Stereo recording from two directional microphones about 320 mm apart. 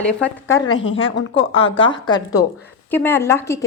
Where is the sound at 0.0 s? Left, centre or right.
Centre.